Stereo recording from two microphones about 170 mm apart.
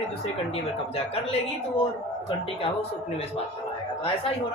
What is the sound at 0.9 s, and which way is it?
Speech, 35° left (ahead or behind).